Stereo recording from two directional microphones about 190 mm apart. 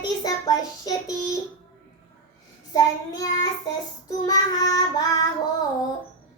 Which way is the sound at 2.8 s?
20° left (ahead or behind).